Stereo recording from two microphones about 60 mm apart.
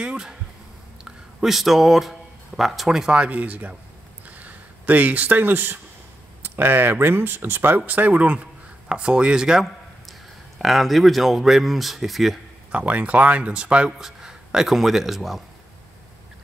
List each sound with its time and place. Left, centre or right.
0.0 s speech: centre
3.2 s speech: right
4.3 s a sound: right
6.4 s speech: right; by 9.7 s centre
10.6 s speech: centre
12.7 s speech: right; by 15.4 s centre